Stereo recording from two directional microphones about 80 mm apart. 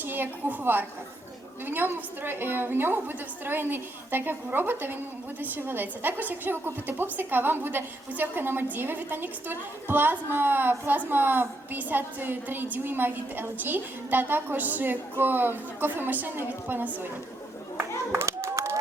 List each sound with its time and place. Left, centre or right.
0.0 s a woman's voice: right
17.7 s clapping: right